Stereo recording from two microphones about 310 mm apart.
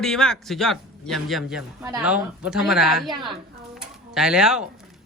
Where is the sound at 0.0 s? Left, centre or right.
Centre.